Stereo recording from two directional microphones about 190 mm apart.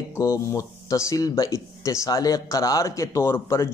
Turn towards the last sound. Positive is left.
turn(degrees=15)  # may be behind; listen again after turning